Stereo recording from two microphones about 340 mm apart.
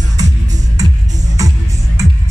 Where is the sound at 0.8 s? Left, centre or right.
Centre.